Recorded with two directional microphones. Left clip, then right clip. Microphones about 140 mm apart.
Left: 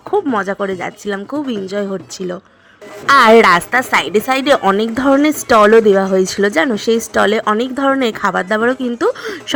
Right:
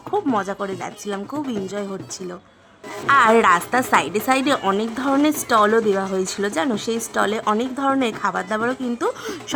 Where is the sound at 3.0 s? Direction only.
35° left (ahead or behind).